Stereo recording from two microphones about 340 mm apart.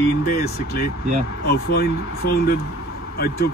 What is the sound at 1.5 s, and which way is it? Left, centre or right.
Speech, left.